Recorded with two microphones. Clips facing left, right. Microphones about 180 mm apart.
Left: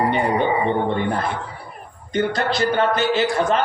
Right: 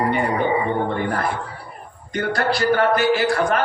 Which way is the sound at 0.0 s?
20° left (ahead or behind).